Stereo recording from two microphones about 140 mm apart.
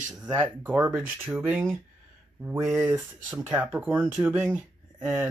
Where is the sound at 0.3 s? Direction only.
15° right (ahead or behind).